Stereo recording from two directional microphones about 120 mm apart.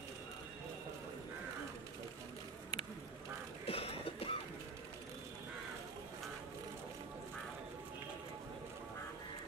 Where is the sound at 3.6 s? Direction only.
55° left (ahead or behind).